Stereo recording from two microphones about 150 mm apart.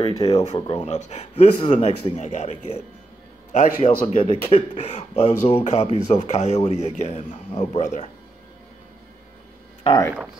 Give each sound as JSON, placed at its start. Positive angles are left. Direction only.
{"t": 0.0, "sound": "speech", "side_deg": 25}
{"t": 0.3, "sound": "a man's voice", "side_deg": 45}
{"t": 4.2, "sound": "a man's voice", "side_deg": 40}
{"t": 9.8, "sound": "speech", "side_deg": 25}